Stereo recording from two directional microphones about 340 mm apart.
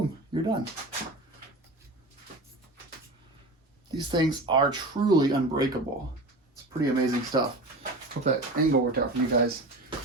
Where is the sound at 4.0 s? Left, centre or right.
Centre.